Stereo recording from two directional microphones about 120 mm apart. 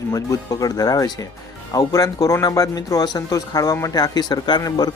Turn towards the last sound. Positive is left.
turn(degrees=35)  # may be behind; listen again after turning